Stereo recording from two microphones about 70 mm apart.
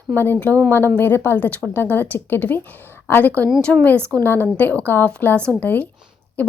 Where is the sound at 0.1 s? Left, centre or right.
Left.